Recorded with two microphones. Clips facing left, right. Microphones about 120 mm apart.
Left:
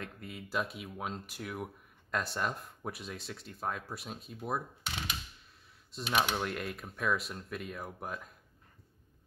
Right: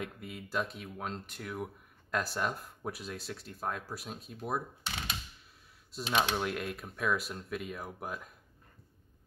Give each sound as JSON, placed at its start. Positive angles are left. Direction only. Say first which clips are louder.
{"t": 0.0, "sound": "speech", "louder": "right 3 dB", "side_deg": 0}
{"t": 5.9, "sound": "speech", "louder": "right 1 dB", "side_deg": 0}